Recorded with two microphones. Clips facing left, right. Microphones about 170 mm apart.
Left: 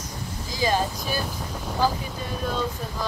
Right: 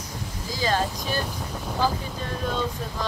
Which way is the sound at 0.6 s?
10° left (ahead or behind).